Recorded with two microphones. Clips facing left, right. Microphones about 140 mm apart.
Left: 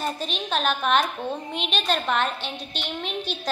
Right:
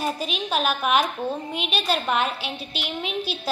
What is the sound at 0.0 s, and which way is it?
A woman's voice, 5° right (ahead or behind).